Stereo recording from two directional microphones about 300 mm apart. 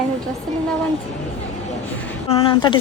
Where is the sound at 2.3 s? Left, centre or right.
Centre.